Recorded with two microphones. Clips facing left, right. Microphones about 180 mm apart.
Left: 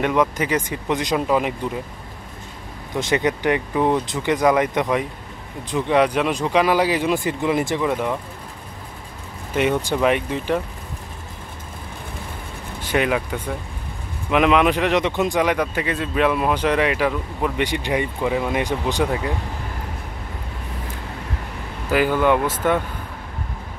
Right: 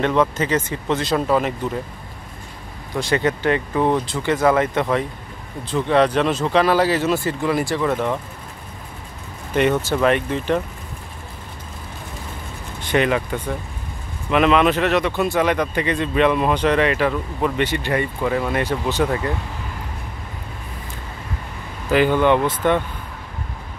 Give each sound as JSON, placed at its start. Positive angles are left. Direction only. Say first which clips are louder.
{"t": 0.0, "sound": "speech", "louder": "right 1 dB", "side_deg": 10}
{"t": 3.0, "sound": "speech", "louder": "even", "side_deg": 15}
{"t": 9.6, "sound": "speech", "louder": "right 2 dB", "side_deg": 10}
{"t": 12.8, "sound": "speech", "louder": "right 2 dB", "side_deg": 10}
{"t": 21.9, "sound": "speech", "louder": "right 2 dB", "side_deg": 5}